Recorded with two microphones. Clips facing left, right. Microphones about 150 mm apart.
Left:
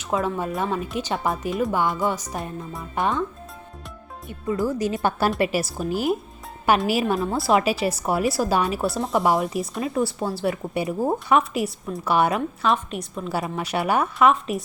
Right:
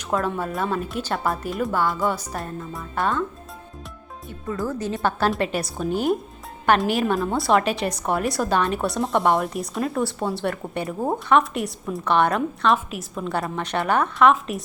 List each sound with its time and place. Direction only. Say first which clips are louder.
0.3 s a woman's voice: even; 10° left (ahead or behind)
4.3 s a woman's voice: left 3 dB; 15° left (ahead or behind)